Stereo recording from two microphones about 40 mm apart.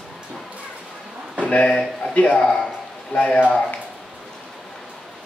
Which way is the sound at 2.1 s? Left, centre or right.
Left.